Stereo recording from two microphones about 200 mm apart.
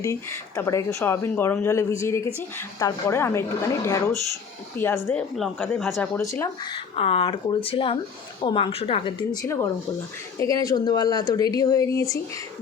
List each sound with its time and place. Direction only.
0.0 s speech: 15° left (ahead or behind)
6.9 s speech: 30° left (ahead or behind)
9.3 s speech: 15° left (ahead or behind)